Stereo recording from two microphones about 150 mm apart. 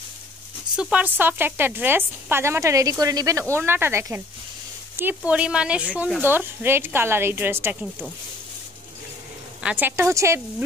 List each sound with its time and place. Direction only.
0.7 s speech: 5° right (ahead or behind)
9.6 s speech: 10° right (ahead or behind)